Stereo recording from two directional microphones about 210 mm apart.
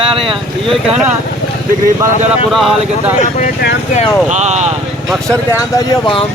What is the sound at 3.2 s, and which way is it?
Speech, 35° left (ahead or behind).